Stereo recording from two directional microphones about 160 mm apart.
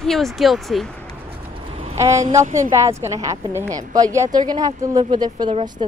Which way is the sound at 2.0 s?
20° right (ahead or behind).